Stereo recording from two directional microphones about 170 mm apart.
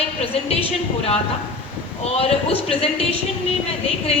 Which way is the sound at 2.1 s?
35° left (ahead or behind).